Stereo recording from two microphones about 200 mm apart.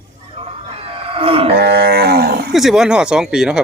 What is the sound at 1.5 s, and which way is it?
Livestock, 50° right (ahead or behind).